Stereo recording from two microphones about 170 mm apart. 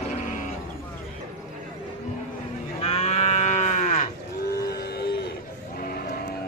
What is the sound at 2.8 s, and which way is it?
Moo, 35° left (ahead or behind).